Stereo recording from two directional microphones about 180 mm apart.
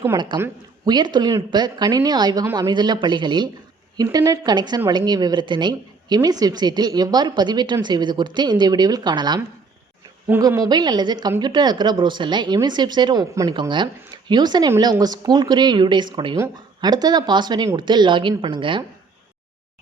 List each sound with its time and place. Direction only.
0.3 s speech: 25° right (ahead or behind)
10.2 s speech: 10° right (ahead or behind)